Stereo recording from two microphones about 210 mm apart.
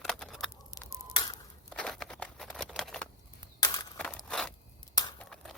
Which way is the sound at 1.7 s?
5° left (ahead or behind).